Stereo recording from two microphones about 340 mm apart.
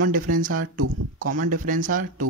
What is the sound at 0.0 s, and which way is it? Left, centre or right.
Speech, right.